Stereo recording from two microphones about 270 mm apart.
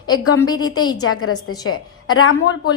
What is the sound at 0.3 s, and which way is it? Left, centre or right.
Speech, centre.